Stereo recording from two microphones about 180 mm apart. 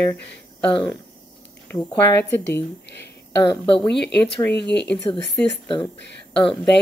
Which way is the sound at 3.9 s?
70° left (ahead or behind).